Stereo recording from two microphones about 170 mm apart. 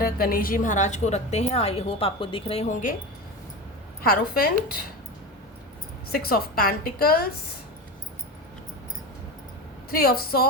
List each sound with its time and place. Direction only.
0.0 s a woman's voice: 60° left (ahead or behind); by 2.6 s 35° left (ahead or behind)
4.0 s a woman's voice: 60° left (ahead or behind)
6.1 s a woman's voice: 60° left (ahead or behind)
9.9 s a woman's voice: 60° left (ahead or behind)